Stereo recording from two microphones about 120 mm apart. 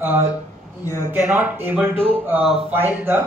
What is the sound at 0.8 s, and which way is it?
Speech, 25° left (ahead or behind).